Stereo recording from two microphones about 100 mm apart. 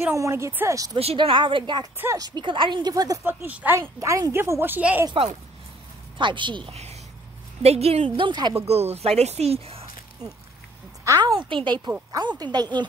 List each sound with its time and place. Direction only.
0.0 s a woman's voice: 30° right (ahead or behind)
1.1 s a woman's voice: 55° right (ahead or behind)
2.9 s a woman's voice: 40° right (ahead or behind)
3.3 s speech: 15° right (ahead or behind)
3.7 s a woman's voice: 30° right (ahead or behind)
6.1 s a woman's voice: 55° right (ahead or behind)
6.7 s speech: 90° right
8.2 s a woman's voice: 50° right (ahead or behind)
8.5 s speech: 90° right
11.1 s a woman's voice: 35° right (ahead or behind)
11.3 s a woman's voice: 55° right (ahead or behind)